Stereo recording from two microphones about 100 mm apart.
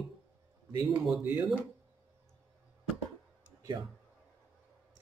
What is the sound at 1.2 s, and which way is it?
Speech, 15° right (ahead or behind).